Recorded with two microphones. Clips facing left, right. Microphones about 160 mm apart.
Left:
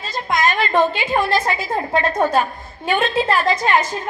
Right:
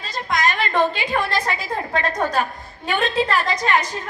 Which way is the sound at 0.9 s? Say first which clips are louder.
Left 4 dB; 25° left (ahead or behind).